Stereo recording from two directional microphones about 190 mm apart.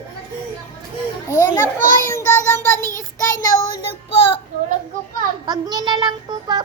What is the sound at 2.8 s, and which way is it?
Child singing, 20° right (ahead or behind).